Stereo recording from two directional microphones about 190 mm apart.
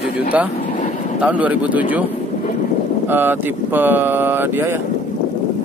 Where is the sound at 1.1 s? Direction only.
5° right (ahead or behind).